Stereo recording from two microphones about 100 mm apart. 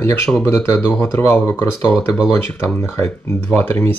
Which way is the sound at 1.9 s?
Centre (ahead or behind).